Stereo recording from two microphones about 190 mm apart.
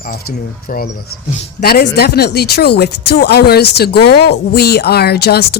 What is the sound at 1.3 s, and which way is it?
Speech, 50° left (ahead or behind).